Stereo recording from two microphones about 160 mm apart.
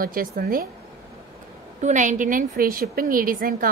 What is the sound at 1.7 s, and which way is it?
A woman's voice, 50° right (ahead or behind).